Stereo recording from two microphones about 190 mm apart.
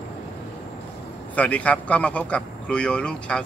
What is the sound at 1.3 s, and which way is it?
A man's voice, 5° left (ahead or behind).